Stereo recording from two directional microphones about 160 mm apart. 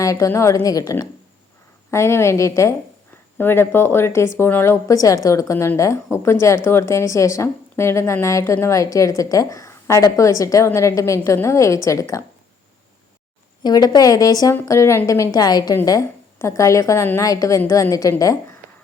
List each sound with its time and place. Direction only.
0.0 s a woman's voice: 20° left (ahead or behind)
13.6 s a woman's voice: 25° left (ahead or behind)